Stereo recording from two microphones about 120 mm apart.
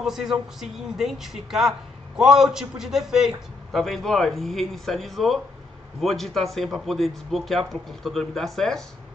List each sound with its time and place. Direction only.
0.0 s a man's voice: 5° right (ahead or behind)